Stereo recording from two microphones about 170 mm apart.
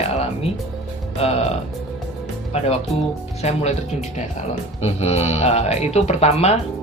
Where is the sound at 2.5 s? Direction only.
40° left (ahead or behind).